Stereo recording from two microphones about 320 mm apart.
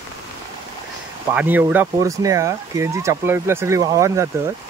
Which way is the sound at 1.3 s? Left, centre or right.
Centre.